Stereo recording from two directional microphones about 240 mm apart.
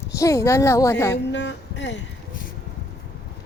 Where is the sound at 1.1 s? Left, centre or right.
Left.